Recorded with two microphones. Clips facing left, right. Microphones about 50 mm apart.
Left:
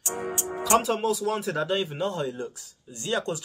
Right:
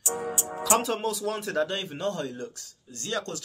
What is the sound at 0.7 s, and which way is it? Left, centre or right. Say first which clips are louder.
A man's voice: left 6 dB; centre.